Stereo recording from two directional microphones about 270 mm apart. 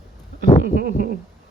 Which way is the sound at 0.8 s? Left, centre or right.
Right.